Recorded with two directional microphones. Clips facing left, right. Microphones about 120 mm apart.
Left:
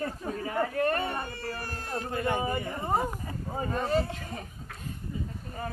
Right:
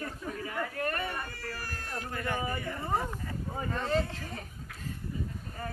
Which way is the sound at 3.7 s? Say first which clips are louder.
Left 3 dB; 20° left (ahead or behind).